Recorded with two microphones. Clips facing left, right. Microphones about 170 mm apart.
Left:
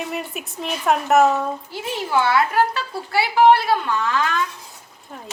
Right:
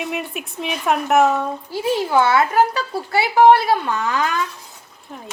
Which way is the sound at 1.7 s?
45° right (ahead or behind).